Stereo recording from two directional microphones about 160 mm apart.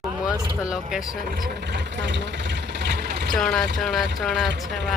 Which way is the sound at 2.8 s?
90° right.